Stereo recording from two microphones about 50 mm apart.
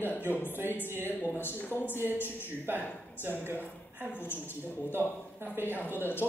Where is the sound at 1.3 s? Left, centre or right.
Left.